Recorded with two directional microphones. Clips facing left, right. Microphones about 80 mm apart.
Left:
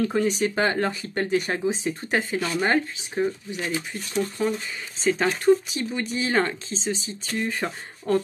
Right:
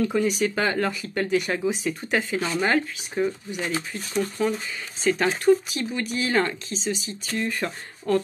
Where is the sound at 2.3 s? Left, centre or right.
Right.